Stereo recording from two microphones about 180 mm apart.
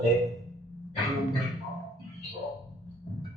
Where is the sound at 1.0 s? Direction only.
Centre (ahead or behind).